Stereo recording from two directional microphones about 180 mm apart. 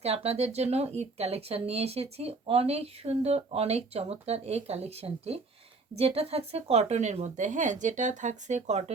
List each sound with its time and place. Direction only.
0.0 s speech: 35° right (ahead or behind)